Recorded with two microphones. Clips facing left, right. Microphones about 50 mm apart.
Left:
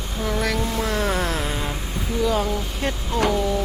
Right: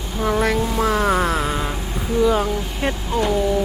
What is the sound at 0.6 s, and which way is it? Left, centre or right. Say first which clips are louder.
Music: right 4 dB; centre.